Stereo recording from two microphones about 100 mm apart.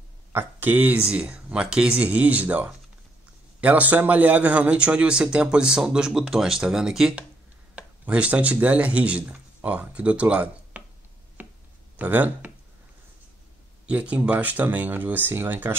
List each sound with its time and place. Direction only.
0.3 s speech: 20° right (ahead or behind)
11.4 s a sound: 20° right (ahead or behind)
12.0 s speech: 15° right (ahead or behind)
13.8 s speech: 10° right (ahead or behind)